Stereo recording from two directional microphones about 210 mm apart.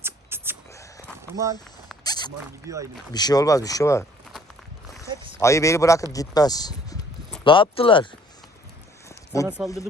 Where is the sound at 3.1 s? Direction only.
20° left (ahead or behind).